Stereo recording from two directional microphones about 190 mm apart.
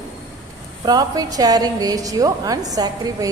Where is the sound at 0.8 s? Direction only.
20° right (ahead or behind).